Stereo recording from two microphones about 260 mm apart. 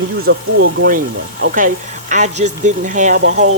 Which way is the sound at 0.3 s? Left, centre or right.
Right.